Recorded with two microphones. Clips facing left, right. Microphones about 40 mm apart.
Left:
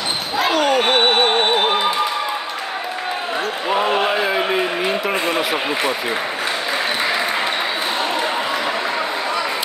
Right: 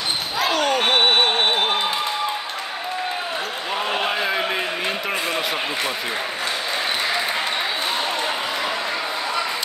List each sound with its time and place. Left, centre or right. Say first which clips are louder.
0.5 s music: left 3 dB; centre
3.6 s basketball bounce: left 8 dB; centre
3.9 s a sound: left 4 dB; centre